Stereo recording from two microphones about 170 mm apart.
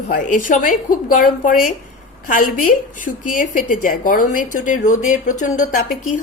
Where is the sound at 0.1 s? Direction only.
50° left (ahead or behind).